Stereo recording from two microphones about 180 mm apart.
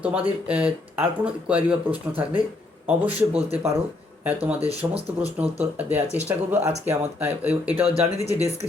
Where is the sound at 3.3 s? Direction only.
35° right (ahead or behind).